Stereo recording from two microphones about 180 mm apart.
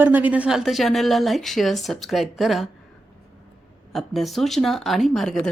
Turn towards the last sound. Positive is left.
turn(degrees=0)  # may be behind; listen again after turning